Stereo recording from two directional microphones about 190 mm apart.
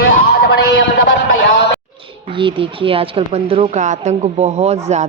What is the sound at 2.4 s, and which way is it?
A woman's voice, 25° right (ahead or behind).